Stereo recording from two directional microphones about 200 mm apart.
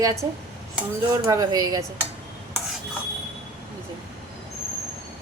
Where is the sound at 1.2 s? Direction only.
15° right (ahead or behind).